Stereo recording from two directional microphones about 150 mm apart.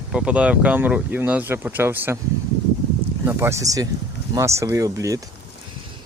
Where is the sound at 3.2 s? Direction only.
15° right (ahead or behind).